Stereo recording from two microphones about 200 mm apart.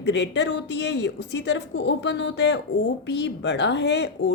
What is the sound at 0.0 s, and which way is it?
Speech, 60° left (ahead or behind).